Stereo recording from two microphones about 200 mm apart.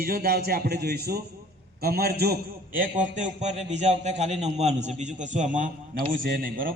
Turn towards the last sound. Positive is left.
turn(degrees=-45)  # may be behind; listen again after turning